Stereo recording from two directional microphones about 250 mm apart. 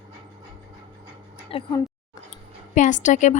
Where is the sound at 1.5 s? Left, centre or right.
Left.